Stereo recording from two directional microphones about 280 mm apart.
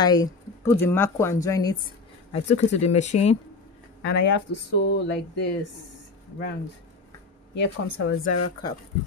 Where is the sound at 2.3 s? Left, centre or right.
Left.